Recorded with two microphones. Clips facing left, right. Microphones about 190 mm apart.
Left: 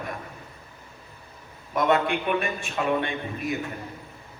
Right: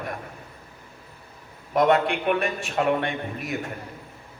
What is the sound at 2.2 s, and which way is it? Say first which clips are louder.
Speech: right 2 dB; 55° right (ahead or behind).